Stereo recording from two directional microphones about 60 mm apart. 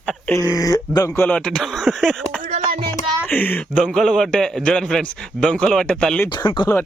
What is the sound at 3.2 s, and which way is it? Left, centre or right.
Speech, left.